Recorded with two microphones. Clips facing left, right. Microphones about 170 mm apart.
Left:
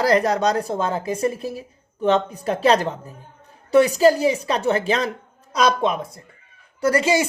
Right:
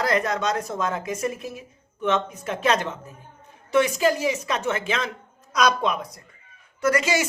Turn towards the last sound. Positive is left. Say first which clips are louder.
# left 3 dB
turn(degrees=30)  # may be behind; listen again after turning